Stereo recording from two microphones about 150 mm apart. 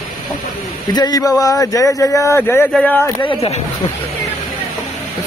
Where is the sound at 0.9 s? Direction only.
25° left (ahead or behind).